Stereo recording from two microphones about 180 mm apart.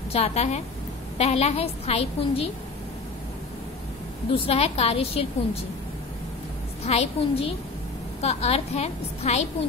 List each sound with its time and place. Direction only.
0.1 s a woman's voice: 35° left (ahead or behind)
4.3 s a woman's voice: 35° left (ahead or behind)
6.8 s a woman's voice: 35° left (ahead or behind)